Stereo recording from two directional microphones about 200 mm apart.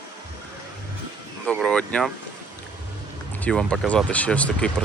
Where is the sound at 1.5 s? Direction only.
5° left (ahead or behind).